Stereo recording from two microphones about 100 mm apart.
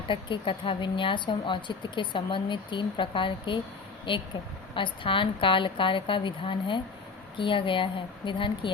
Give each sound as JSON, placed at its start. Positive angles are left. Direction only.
{"t": 0.1, "sound": "speech", "side_deg": 60}